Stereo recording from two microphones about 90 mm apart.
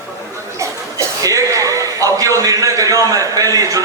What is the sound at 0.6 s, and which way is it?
A man's voice, 35° right (ahead or behind).